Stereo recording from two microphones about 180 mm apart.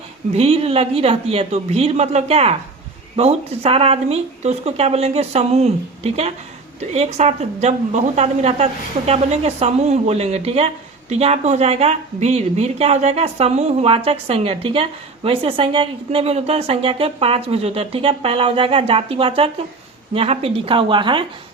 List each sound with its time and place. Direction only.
0.3 s a woman's voice: 35° right (ahead or behind)